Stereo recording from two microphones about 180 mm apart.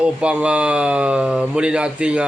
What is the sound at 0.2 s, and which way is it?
Speech, 5° right (ahead or behind).